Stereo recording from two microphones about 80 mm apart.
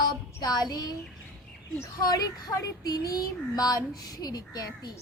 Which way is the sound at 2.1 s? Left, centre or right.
Left.